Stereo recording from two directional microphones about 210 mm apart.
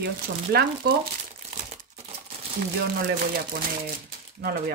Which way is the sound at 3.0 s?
45° right (ahead or behind).